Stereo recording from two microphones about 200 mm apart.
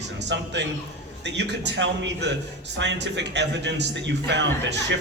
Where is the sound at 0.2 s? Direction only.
60° right (ahead or behind).